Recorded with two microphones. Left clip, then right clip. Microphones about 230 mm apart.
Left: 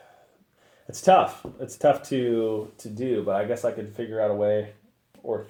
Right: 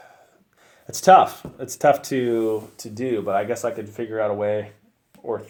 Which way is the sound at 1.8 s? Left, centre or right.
Right.